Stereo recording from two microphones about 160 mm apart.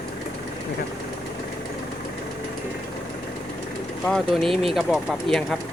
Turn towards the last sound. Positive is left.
turn(degrees=0)  # may be behind; listen again after turning